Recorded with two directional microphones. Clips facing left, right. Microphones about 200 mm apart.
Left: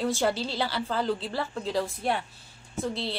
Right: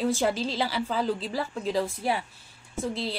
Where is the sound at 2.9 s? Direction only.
30° left (ahead or behind).